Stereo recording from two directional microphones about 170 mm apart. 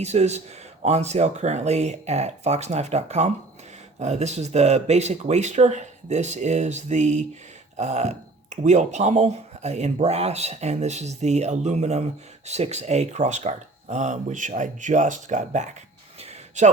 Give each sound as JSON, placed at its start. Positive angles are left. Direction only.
{"t": 0.0, "sound": "speech", "side_deg": -40}